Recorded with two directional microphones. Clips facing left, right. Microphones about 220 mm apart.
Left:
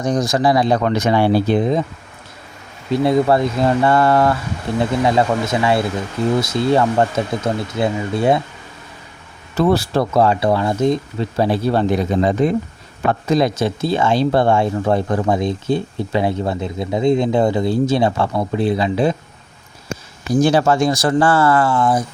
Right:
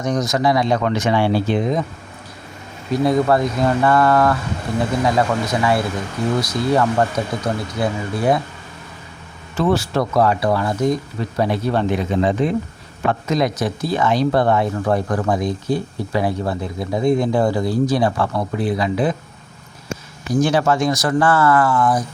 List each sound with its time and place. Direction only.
0.0 s speech: 30° left (ahead or behind)
2.9 s speech: 25° left (ahead or behind)
9.6 s speech: 35° left (ahead or behind)
20.3 s speech: 30° left (ahead or behind)